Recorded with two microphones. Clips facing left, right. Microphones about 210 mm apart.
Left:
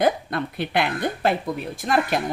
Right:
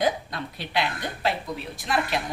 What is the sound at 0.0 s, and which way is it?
A woman's voice, 55° left (ahead or behind).